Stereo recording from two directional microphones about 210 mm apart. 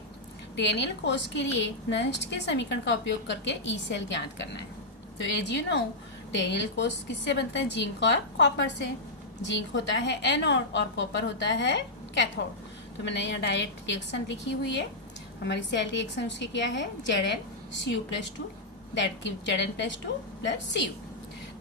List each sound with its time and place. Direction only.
0.5 s a woman's voice: 55° left (ahead or behind)
13.1 s a woman's voice: 55° left (ahead or behind)